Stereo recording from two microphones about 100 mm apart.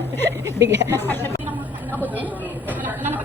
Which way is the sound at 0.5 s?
30° right (ahead or behind).